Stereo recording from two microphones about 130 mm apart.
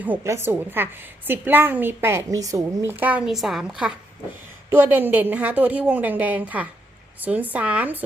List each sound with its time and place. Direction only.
0.0 s a woman's voice: 15° right (ahead or behind)
4.7 s a woman's voice: 15° right (ahead or behind)